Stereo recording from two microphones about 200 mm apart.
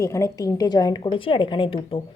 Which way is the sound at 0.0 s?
15° left (ahead or behind).